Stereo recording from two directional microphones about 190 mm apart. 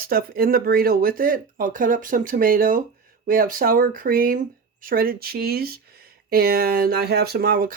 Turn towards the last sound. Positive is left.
turn(degrees=-50)  # may be behind; listen again after turning